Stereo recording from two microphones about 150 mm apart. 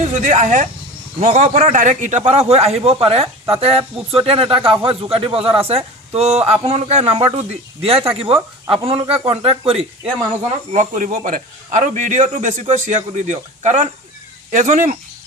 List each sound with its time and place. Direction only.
0.1 s a man's voice: 55° right (ahead or behind); by 9.8 s 40° right (ahead or behind)
10.7 s a man's voice: 55° right (ahead or behind)